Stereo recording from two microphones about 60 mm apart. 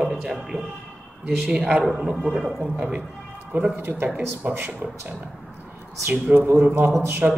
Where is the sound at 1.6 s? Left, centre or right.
Centre.